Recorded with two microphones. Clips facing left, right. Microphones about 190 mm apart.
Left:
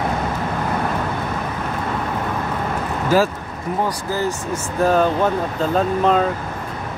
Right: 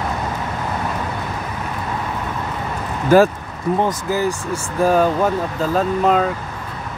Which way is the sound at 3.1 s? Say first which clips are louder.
Right 5 dB; 55° right (ahead or behind).